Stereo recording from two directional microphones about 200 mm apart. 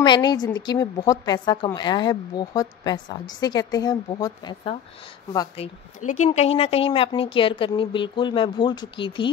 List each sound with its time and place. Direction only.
0.0 s a woman's voice: 20° left (ahead or behind)
6.2 s a woman's voice: 35° left (ahead or behind)